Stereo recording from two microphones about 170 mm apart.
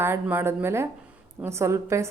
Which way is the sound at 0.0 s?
10° right (ahead or behind).